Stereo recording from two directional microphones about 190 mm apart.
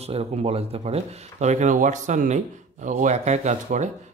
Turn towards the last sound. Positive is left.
turn(degrees=-40)  # may be behind; listen again after turning